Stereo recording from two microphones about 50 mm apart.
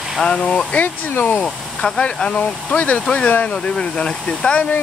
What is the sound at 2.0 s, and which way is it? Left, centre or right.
Speech, left.